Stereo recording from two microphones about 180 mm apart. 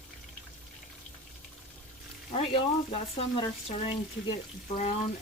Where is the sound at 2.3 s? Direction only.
30° left (ahead or behind).